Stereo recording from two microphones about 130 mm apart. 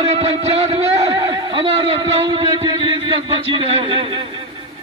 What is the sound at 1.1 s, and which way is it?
A man's voice, 30° right (ahead or behind).